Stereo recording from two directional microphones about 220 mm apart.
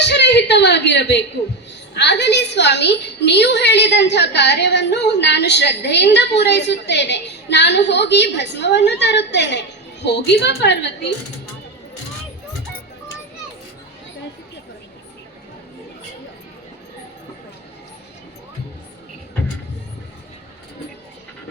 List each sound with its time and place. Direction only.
0.0 s a woman's voice: 50° left (ahead or behind)